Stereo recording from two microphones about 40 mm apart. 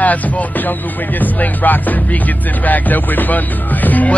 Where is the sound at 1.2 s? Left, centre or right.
Left.